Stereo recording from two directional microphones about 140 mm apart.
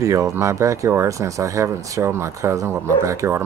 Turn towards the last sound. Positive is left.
turn(degrees=-20)  # may be behind; listen again after turning